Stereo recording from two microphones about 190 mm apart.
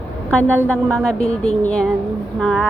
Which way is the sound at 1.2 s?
35° left (ahead or behind).